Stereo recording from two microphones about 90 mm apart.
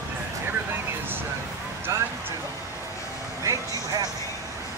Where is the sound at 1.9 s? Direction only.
30° right (ahead or behind).